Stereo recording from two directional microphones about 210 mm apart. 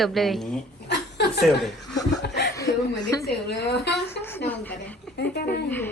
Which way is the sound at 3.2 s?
55° left (ahead or behind).